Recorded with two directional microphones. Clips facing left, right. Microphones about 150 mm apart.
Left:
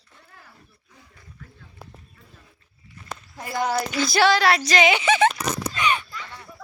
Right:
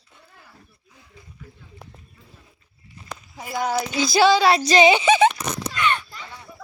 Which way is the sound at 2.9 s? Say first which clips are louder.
Even; 20° right (ahead or behind).